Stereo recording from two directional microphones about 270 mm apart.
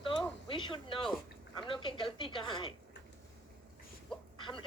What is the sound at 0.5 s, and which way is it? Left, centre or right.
A woman's voice, centre.